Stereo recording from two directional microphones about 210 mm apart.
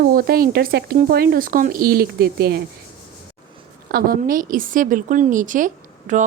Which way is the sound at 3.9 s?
45° right (ahead or behind).